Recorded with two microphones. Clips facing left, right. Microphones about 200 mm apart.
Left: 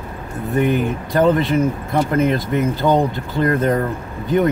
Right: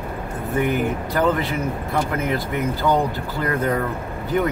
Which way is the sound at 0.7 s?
20° left (ahead or behind).